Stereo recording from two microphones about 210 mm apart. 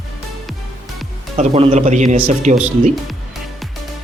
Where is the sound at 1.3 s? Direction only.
30° right (ahead or behind).